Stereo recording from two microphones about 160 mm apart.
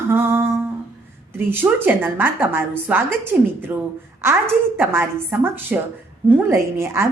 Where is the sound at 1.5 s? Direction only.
15° right (ahead or behind).